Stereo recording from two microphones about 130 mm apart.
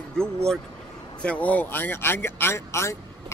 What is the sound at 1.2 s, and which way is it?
A man's voice, 10° left (ahead or behind).